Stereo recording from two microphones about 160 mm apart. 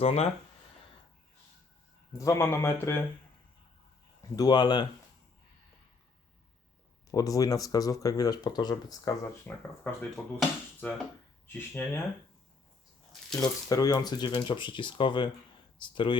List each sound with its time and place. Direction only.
0.0 s speech: 40° left (ahead or behind)
2.1 s speech: 20° left (ahead or behind)
4.4 s speech: 25° left (ahead or behind)
7.1 s speech: 20° left (ahead or behind)
9.5 s speech: 10° left (ahead or behind)
13.4 s speech: 20° left (ahead or behind)